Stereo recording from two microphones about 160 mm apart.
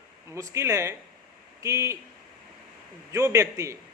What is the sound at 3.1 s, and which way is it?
Speech, 20° right (ahead or behind).